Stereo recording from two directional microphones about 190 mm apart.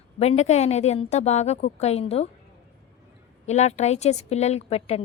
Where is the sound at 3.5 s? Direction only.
35° left (ahead or behind).